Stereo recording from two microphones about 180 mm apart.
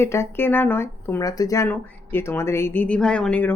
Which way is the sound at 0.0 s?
15° left (ahead or behind).